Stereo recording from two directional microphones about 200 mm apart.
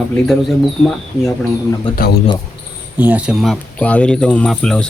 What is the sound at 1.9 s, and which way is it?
Speech, 50° left (ahead or behind).